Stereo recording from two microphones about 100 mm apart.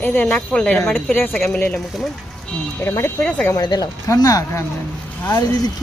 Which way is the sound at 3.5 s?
45° left (ahead or behind).